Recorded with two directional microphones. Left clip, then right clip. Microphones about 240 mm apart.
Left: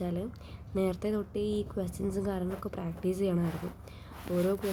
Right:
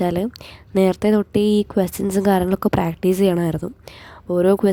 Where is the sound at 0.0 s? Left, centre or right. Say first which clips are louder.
Right 15 dB; right.